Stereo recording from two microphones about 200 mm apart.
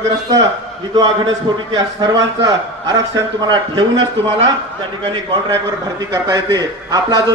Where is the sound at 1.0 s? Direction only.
20° right (ahead or behind).